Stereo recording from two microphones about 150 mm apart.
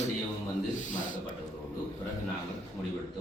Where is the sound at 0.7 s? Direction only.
55° left (ahead or behind).